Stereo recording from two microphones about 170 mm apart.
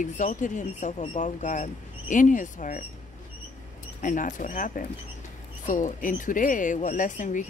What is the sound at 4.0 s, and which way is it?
Speech, 50° left (ahead or behind).